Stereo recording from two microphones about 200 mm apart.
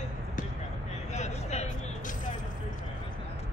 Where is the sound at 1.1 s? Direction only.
35° left (ahead or behind).